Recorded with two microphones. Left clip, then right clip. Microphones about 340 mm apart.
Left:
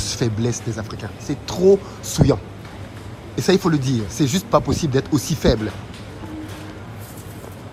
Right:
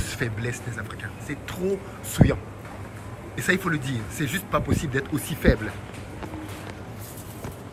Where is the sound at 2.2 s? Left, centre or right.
Right.